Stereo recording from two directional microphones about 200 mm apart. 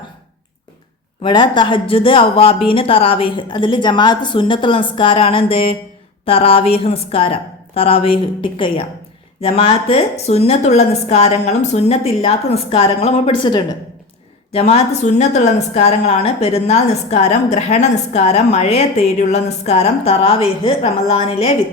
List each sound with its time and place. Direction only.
1.2 s a woman's voice: 20° left (ahead or behind)